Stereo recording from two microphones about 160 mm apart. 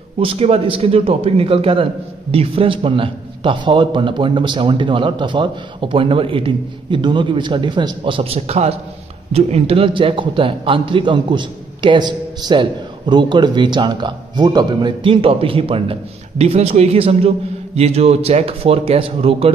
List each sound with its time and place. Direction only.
0.2 s a man's voice: 35° right (ahead or behind)